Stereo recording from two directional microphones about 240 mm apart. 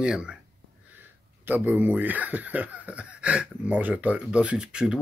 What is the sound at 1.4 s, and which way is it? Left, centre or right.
Speech, centre.